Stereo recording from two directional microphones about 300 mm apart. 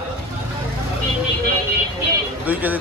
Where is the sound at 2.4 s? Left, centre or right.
Centre.